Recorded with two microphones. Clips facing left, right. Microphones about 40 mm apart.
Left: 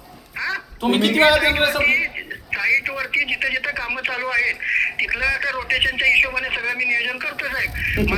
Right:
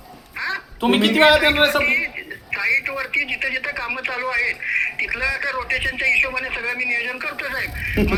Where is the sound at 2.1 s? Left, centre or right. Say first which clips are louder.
Left 1 dB; centre.